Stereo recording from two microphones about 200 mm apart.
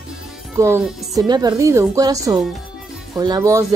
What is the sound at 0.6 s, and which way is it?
A woman's voice, 15° right (ahead or behind).